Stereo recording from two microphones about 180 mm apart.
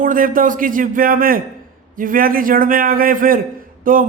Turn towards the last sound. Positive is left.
turn(degrees=-50)  # may be behind; listen again after turning